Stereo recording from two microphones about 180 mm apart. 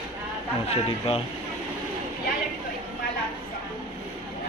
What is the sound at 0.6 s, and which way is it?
Speech, 30° left (ahead or behind).